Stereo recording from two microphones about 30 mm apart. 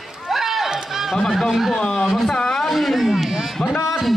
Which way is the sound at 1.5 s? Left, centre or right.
Centre.